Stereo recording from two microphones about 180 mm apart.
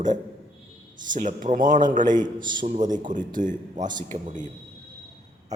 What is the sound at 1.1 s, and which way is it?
Speech, 45° right (ahead or behind).